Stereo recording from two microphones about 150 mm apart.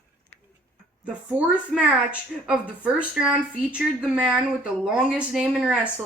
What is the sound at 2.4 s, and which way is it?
Speech, 5° right (ahead or behind).